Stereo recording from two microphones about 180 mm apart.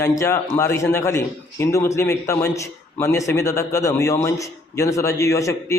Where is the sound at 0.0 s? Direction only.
15° left (ahead or behind).